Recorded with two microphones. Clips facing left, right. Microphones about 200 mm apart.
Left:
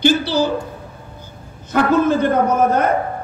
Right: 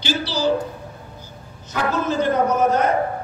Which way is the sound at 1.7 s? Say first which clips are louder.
Left 7 dB; 55° left (ahead or behind).